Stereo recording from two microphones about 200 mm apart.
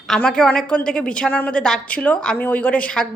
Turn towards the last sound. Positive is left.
turn(degrees=5)  # may be behind; listen again after turning